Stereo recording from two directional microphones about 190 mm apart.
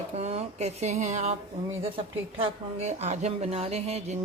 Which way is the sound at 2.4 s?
35° right (ahead or behind).